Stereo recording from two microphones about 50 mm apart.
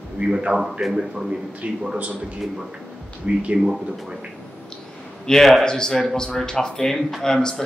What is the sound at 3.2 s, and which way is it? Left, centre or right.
Speech, right.